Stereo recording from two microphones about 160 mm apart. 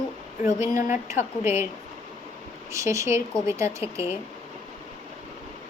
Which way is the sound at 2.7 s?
20° right (ahead or behind).